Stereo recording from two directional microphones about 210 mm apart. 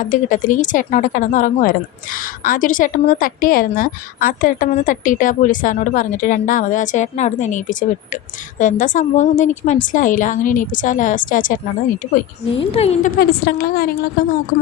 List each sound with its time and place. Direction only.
0.0 s a woman's voice: 40° left (ahead or behind)
12.5 s a woman's voice: 30° left (ahead or behind); by 13.9 s 45° left (ahead or behind)